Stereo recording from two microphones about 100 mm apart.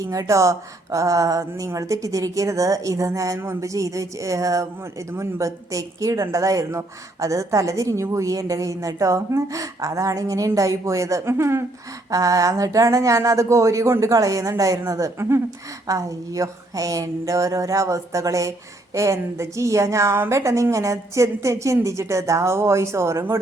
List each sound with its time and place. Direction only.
0.0 s a woman's voice: 35° right (ahead or behind)